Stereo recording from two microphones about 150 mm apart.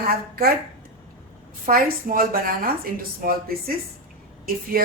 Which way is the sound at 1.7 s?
70° right (ahead or behind).